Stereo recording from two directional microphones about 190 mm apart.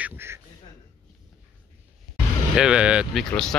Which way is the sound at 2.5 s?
5° right (ahead or behind).